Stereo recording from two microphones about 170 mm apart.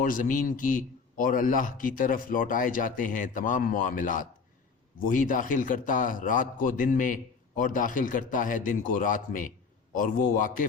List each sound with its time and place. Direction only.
0.0 s a man's voice: 55° left (ahead or behind)